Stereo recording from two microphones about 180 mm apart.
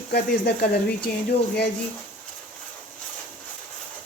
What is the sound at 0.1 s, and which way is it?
Speech, 65° left (ahead or behind).